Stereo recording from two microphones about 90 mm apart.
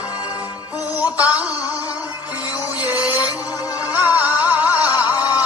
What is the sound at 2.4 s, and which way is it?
Music, 45° left (ahead or behind).